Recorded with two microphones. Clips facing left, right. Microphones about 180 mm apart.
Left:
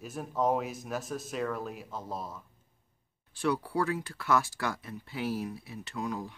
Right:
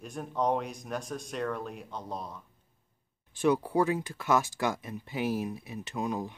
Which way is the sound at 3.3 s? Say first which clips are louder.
Right 4 dB; 20° right (ahead or behind).